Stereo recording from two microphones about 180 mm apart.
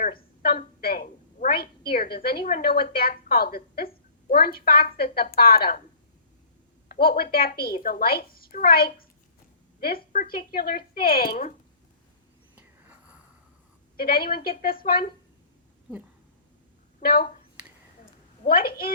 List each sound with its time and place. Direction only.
0.0 s a sound: 55° left (ahead or behind)
1.9 s a woman's voice: 55° left (ahead or behind)
6.8 s a woman's voice: 55° left (ahead or behind)
12.5 s a sound: 10° right (ahead or behind)
13.9 s a woman's voice: 55° left (ahead or behind)
17.0 s speech: 55° left (ahead or behind)
18.4 s a woman's voice: 55° left (ahead or behind)